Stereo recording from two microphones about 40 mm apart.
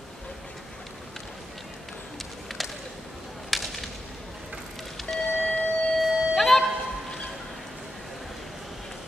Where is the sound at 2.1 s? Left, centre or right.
Centre.